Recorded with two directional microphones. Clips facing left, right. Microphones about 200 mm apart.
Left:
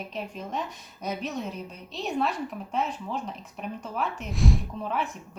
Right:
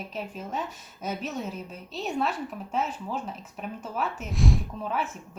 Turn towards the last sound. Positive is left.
turn(degrees=0)  # may be behind; listen again after turning